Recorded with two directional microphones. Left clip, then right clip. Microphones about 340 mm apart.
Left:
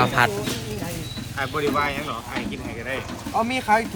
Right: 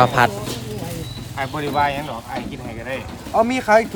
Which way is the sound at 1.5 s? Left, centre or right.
Right.